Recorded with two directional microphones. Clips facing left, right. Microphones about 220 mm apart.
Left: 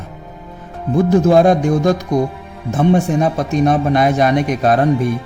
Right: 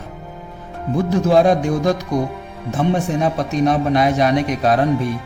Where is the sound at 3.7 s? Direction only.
50° left (ahead or behind).